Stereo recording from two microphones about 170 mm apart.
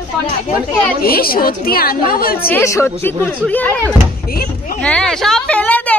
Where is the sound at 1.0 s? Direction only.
60° left (ahead or behind).